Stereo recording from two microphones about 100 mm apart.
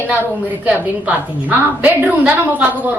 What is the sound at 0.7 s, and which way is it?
A woman's voice, 15° right (ahead or behind).